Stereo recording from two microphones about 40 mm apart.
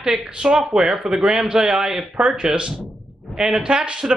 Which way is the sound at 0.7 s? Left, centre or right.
Centre.